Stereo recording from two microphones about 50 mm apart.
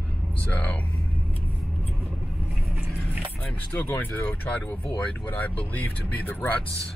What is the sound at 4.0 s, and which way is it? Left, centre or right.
Speech, left.